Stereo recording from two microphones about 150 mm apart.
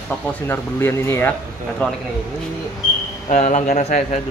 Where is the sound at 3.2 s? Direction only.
50° left (ahead or behind).